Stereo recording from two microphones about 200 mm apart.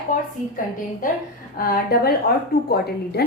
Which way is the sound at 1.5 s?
45° left (ahead or behind).